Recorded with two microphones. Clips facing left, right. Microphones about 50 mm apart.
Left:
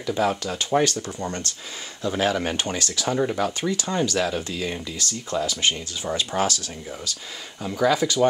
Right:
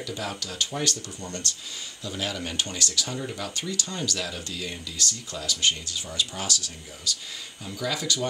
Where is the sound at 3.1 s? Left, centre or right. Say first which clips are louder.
Left 10 dB; left.